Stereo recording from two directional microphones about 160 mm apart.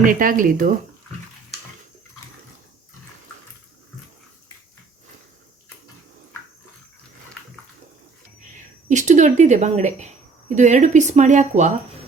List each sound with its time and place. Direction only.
0.0 s speech: 60° right (ahead or behind)
8.9 s speech: 50° right (ahead or behind)